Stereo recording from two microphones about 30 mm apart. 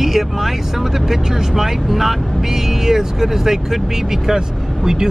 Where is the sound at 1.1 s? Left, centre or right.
Centre.